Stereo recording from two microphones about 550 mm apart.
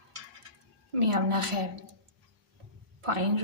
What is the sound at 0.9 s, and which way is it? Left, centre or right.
Speech, right.